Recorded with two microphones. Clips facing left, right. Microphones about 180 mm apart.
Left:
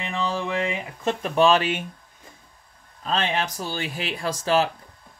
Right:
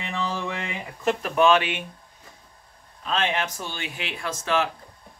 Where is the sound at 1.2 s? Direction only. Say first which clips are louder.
Left 1 dB; 30° left (ahead or behind).